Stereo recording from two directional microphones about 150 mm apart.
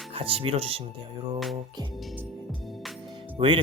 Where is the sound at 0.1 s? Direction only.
40° right (ahead or behind).